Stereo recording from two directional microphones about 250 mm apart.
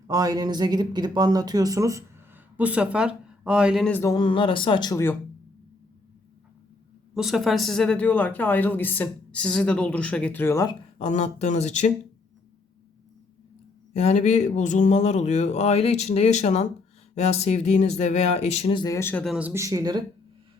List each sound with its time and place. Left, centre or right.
0.1 s speech: centre
7.1 s speech: centre
10.9 s speech: left
13.9 s speech: left; by 20.0 s centre